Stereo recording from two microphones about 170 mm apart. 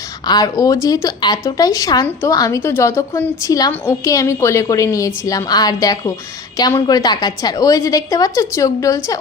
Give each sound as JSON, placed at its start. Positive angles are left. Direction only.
{"t": 0.3, "sound": "speech", "side_deg": 20}